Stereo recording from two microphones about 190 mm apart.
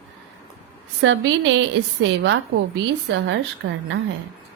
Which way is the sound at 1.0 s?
75° right (ahead or behind).